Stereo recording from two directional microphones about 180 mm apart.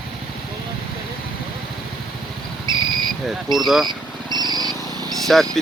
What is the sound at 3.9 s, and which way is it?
Vehicle, 25° right (ahead or behind).